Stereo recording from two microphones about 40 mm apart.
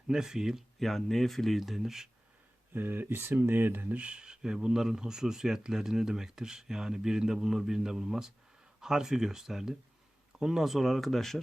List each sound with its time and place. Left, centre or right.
0.1 s speech: centre
0.8 s speech: centre
2.7 s speech: right
4.0 s speech: right; by 11.3 s centre